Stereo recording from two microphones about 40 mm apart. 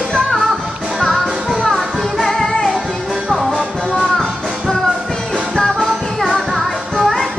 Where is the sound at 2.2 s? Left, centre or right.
Centre.